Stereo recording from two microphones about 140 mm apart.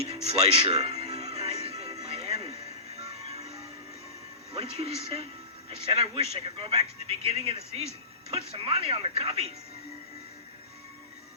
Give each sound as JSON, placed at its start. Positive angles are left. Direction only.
{"t": 0.0, "sound": "speech", "side_deg": -45}
{"t": 2.0, "sound": "music", "side_deg": -45}
{"t": 4.5, "sound": "speech", "side_deg": -45}